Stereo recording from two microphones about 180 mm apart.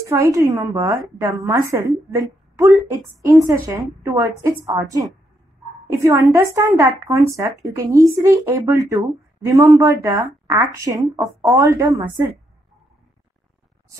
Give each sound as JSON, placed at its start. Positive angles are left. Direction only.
{"t": 0.0, "sound": "a woman's voice", "side_deg": -15}